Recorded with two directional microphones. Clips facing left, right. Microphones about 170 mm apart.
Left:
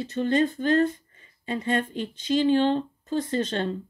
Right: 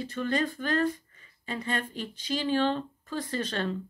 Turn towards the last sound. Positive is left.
turn(degrees=25)  # may be behind; listen again after turning